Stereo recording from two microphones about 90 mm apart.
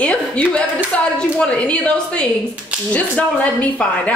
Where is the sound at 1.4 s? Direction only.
10° left (ahead or behind).